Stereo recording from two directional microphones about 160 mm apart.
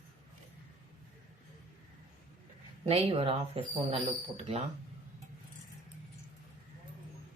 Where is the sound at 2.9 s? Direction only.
35° right (ahead or behind).